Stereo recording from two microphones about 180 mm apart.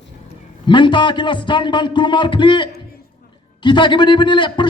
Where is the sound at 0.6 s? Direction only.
25° left (ahead or behind).